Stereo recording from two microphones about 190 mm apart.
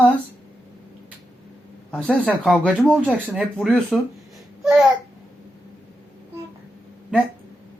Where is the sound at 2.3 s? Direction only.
5° right (ahead or behind).